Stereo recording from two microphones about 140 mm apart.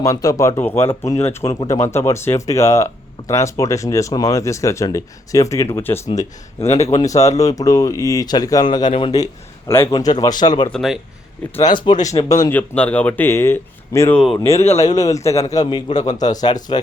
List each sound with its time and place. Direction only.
0.0 s speech: 25° left (ahead or behind)
6.1 s speech: 50° left (ahead or behind)
6.9 s speech: 25° left (ahead or behind)
10.7 s speech: centre (ahead or behind)
11.6 s speech: 35° left (ahead or behind)
12.5 s speech: 10° left (ahead or behind); by 16.8 s 30° left (ahead or behind)